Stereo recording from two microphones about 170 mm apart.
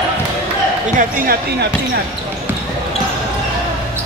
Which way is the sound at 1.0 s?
50° right (ahead or behind).